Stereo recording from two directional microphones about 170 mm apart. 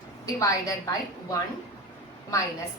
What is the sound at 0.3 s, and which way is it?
A woman's voice, 20° left (ahead or behind).